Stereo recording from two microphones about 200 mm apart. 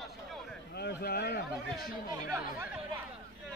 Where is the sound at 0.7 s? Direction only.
55° left (ahead or behind).